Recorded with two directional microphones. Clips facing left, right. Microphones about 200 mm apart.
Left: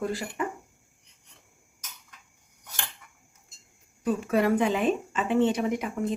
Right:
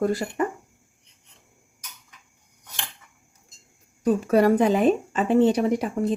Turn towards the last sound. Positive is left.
turn(degrees=-35)  # may be behind; listen again after turning